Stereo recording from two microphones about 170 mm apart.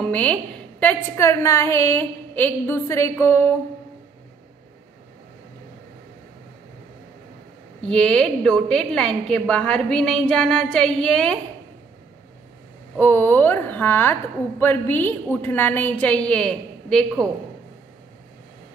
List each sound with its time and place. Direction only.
0.0 s a woman's voice: 5° left (ahead or behind)
7.8 s a woman's voice: 5° left (ahead or behind)
12.9 s a woman's voice: 10° left (ahead or behind)